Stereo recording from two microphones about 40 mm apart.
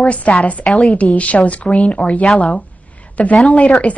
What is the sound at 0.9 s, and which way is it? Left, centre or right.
Speech, left.